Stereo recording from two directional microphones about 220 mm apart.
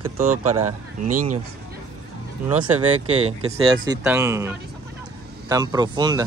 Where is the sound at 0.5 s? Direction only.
90° right.